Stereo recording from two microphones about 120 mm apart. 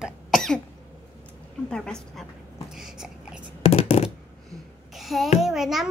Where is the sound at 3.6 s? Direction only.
60° left (ahead or behind).